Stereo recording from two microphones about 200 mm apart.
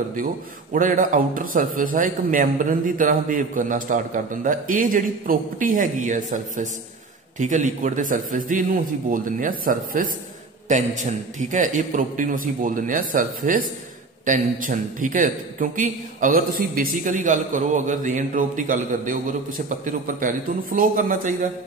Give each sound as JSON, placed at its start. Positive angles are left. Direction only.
{"t": 0.7, "sound": "a man's voice", "side_deg": -40}